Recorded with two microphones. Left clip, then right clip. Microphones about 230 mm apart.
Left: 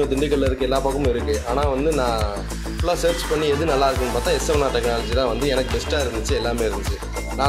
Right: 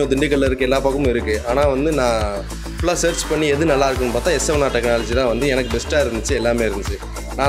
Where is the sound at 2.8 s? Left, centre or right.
Right.